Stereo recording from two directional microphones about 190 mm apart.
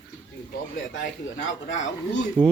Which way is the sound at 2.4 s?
25° right (ahead or behind).